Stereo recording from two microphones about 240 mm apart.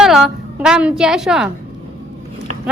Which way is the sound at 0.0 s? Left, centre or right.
Centre.